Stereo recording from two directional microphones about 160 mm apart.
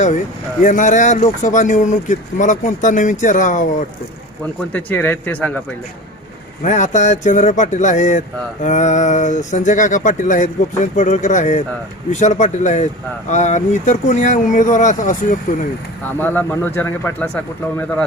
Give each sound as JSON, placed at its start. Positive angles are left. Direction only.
{"t": 0.6, "sound": "speech", "side_deg": 55}
{"t": 4.7, "sound": "speech", "side_deg": 10}
{"t": 6.6, "sound": "speech", "side_deg": 50}
{"t": 16.1, "sound": "speech", "side_deg": 10}